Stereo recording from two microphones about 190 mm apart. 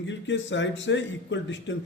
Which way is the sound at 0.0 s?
70° left (ahead or behind).